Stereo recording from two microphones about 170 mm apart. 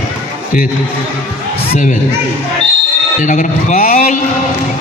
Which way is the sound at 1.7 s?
50° left (ahead or behind).